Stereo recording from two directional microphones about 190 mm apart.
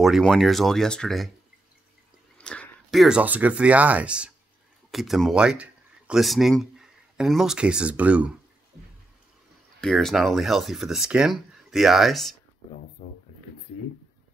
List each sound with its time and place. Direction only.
0.0 s speech: centre (ahead or behind)
2.3 s speech: 5° left (ahead or behind)
9.8 s speech: centre (ahead or behind)
13.0 s speech: 35° left (ahead or behind)